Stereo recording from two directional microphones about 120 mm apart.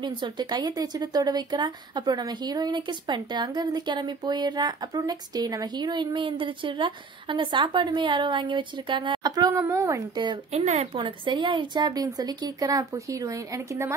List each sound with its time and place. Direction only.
0.0 s a woman's voice: 40° right (ahead or behind)
10.5 s speech: 70° right (ahead or behind)
11.0 s speech: 40° right (ahead or behind); by 13.9 s 25° right (ahead or behind)